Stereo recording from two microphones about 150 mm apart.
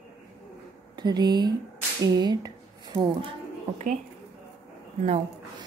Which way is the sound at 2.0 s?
25° right (ahead or behind).